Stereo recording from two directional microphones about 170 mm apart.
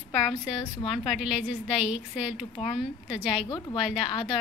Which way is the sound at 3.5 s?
25° left (ahead or behind).